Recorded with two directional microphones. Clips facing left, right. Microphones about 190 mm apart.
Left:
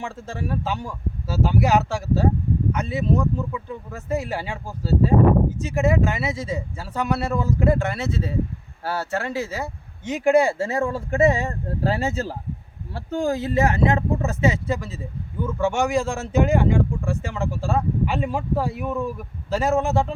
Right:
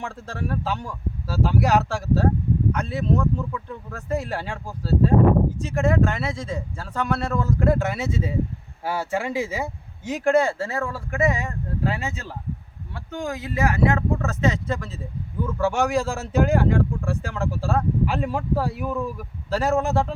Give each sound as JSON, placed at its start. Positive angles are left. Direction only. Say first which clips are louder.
{"t": 0.0, "sound": "speech", "louder": "left 1 dB", "side_deg": 0}
{"t": 10.1, "sound": "speech", "louder": "left 2 dB", "side_deg": 5}